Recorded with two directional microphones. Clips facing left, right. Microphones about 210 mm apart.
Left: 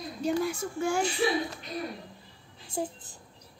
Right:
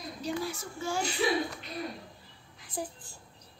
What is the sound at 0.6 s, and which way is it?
Speech, 55° left (ahead or behind).